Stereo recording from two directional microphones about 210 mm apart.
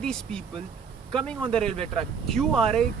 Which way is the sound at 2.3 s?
Centre (ahead or behind).